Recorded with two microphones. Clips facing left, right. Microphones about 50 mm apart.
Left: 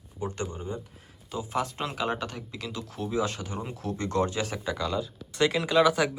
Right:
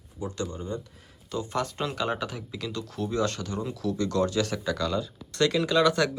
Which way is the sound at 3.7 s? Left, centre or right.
Left.